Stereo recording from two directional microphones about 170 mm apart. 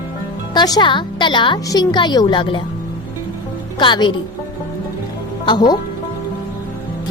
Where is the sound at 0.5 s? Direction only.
25° left (ahead or behind).